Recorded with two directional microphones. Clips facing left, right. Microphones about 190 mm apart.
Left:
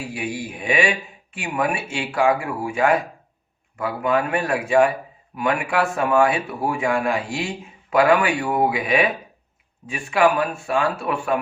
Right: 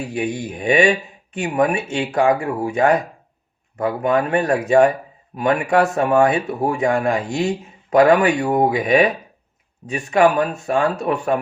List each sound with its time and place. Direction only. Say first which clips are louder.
0.4 s speech: right 6 dB; 40° right (ahead or behind)